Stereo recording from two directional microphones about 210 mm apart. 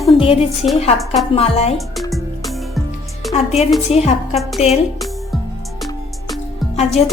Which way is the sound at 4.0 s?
Centre (ahead or behind).